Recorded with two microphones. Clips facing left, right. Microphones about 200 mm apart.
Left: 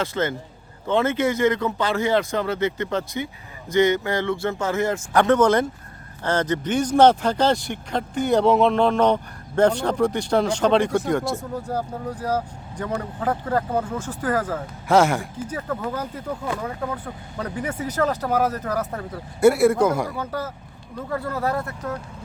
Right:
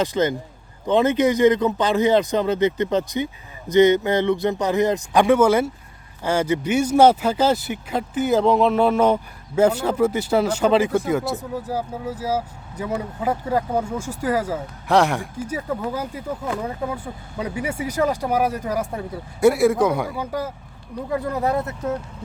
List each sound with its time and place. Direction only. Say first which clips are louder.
0.0 s a man's voice: right 4 dB; 15° right (ahead or behind); by 15.3 s centre (ahead or behind)
15.4 s speech: right 3 dB; 10° right (ahead or behind)
19.4 s a man's voice: even; centre (ahead or behind)
20.1 s a man's voice: right 2 dB; 15° right (ahead or behind)